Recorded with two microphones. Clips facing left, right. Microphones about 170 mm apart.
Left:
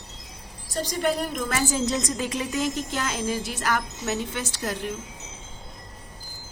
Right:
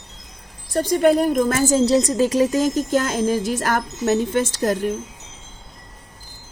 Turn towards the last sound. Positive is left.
turn(degrees=-45)  # may be behind; listen again after turning